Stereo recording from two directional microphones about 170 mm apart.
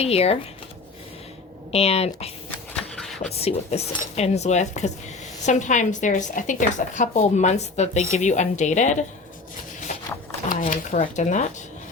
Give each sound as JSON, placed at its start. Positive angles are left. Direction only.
{"t": 0.0, "sound": "speech", "side_deg": 35}
{"t": 1.7, "sound": "speech", "side_deg": 35}
{"t": 3.0, "sound": "a sound", "side_deg": 0}
{"t": 3.3, "sound": "a woman's voice", "side_deg": 35}
{"t": 10.5, "sound": "a woman's voice", "side_deg": 50}